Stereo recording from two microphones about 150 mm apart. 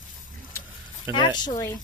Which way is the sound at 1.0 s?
30° left (ahead or behind).